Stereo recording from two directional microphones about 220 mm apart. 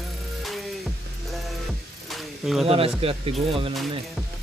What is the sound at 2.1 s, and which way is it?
Snake, centre (ahead or behind).